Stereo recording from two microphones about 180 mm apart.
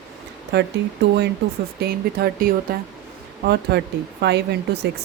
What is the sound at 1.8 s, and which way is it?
Speech, 60° right (ahead or behind).